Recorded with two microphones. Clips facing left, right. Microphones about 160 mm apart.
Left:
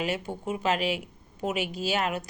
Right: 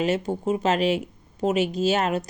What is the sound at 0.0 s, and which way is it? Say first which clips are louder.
A woman's voice: right 7 dB; 45° right (ahead or behind).